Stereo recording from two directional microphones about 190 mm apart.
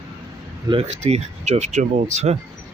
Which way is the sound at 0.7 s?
35° right (ahead or behind).